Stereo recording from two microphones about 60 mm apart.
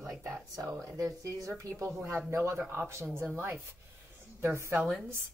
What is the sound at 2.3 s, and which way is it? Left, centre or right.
A woman's voice, right.